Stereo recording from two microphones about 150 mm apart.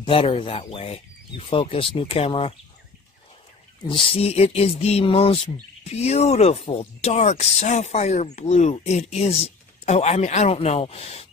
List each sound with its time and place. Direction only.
0.0 s speech: 35° left (ahead or behind)
3.8 s speech: 35° left (ahead or behind)